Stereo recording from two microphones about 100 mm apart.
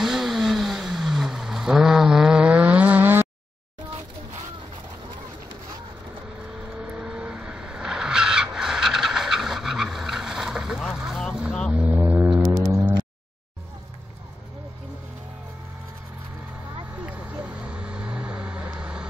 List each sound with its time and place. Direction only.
0.0 s vehicle: centre (ahead or behind); by 3.3 s 20° right (ahead or behind)
6.8 s vehicle: 10° right (ahead or behind)
12.4 s a sound: 35° right (ahead or behind)
17.0 s vehicle: 15° right (ahead or behind)